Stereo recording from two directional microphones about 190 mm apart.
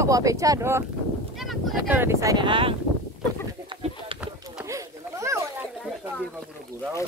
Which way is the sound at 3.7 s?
30° right (ahead or behind).